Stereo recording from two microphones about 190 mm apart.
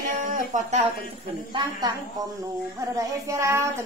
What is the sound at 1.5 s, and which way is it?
Speech, 20° right (ahead or behind).